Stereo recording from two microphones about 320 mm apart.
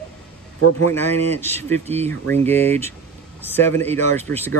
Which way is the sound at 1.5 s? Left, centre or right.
Centre.